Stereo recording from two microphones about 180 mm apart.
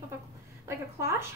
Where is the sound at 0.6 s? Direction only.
15° right (ahead or behind).